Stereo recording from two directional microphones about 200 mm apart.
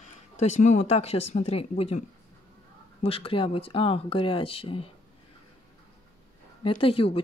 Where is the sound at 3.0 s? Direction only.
25° left (ahead or behind).